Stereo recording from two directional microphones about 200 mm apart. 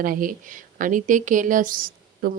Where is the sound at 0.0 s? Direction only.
45° right (ahead or behind).